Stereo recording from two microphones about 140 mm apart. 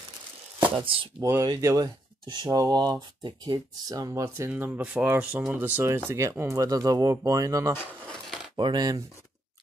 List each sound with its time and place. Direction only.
1.2 s speech: 25° right (ahead or behind)
7.7 s a sound: 5° left (ahead or behind)
8.5 s speech: 35° right (ahead or behind)